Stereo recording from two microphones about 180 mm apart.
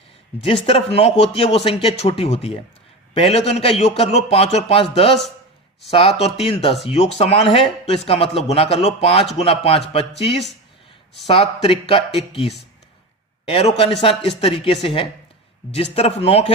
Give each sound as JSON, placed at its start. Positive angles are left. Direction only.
{"t": 0.4, "sound": "a man's voice", "side_deg": 30}